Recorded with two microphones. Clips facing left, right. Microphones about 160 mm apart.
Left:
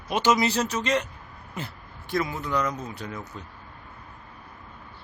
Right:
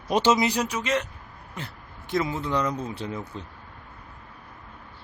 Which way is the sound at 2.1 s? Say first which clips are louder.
Right 1 dB; 25° right (ahead or behind).